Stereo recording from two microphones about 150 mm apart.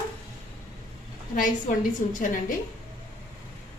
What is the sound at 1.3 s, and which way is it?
A woman's voice, 60° left (ahead or behind).